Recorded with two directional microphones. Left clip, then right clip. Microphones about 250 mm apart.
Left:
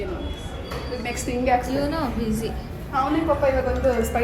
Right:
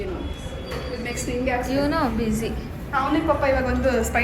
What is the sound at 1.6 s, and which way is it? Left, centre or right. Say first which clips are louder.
Speech: right 2 dB; centre.